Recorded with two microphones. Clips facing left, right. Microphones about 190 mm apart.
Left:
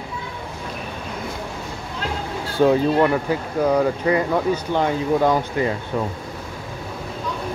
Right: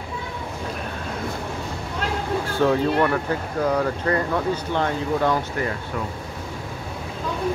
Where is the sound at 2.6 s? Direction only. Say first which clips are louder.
Left 4 dB; 15° left (ahead or behind).